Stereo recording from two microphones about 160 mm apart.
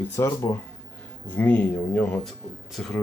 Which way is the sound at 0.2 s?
20° left (ahead or behind).